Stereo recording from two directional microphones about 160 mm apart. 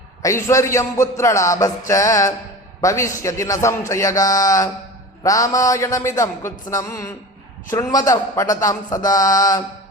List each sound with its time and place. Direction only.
0.2 s a man's voice: 20° left (ahead or behind)